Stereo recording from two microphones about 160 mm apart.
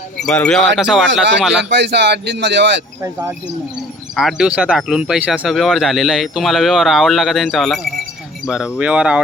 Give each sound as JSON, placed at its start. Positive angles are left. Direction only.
{"t": 0.2, "sound": "speech", "side_deg": 5}
{"t": 1.7, "sound": "speech", "side_deg": -90}
{"t": 3.0, "sound": "speech", "side_deg": -15}
{"t": 4.1, "sound": "speech", "side_deg": 0}